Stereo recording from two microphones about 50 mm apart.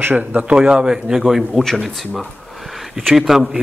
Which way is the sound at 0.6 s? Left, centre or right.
Centre.